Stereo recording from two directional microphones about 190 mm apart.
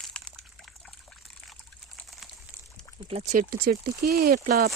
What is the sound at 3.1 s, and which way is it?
Speech, 30° right (ahead or behind).